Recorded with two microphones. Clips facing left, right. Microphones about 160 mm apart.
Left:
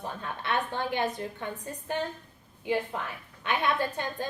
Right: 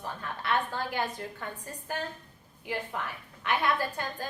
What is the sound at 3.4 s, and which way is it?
Speech, 20° left (ahead or behind).